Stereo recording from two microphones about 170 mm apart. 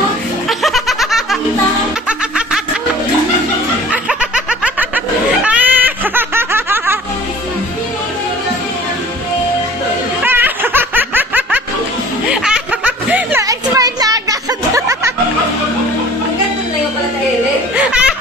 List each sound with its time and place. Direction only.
0.5 s snicker: centre (ahead or behind)
2.0 s music: 5° right (ahead or behind)
3.9 s snicker: 5° right (ahead or behind)
10.2 s music: 10° right (ahead or behind)
12.3 s snicker: 5° right (ahead or behind); by 14.2 s 20° right (ahead or behind)
14.7 s music: 15° right (ahead or behind)
17.7 s laughter: 5° right (ahead or behind)